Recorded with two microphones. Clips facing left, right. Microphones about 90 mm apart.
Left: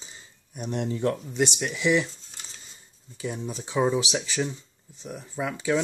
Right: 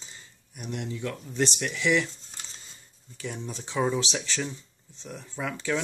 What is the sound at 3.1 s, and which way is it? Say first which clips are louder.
Speech: left 4 dB; 15° left (ahead or behind).